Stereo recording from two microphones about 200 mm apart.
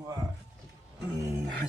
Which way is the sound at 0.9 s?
15° right (ahead or behind).